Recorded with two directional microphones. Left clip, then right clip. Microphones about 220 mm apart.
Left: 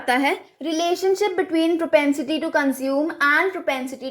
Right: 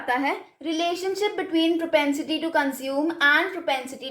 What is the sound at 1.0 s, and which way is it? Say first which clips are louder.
A woman's voice: left 6 dB; 30° left (ahead or behind).